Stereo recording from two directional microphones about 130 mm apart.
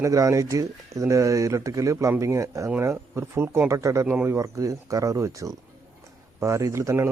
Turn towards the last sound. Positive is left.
turn(degrees=-20)  # may be behind; listen again after turning